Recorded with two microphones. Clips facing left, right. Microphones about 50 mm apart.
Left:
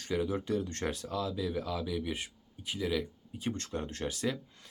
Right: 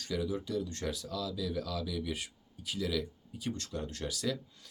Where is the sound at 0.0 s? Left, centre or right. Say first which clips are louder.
Left 2 dB; left.